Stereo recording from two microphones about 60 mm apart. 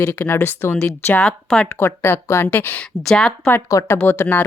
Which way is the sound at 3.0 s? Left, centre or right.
Centre.